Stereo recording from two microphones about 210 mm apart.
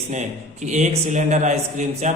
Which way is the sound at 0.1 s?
35° right (ahead or behind).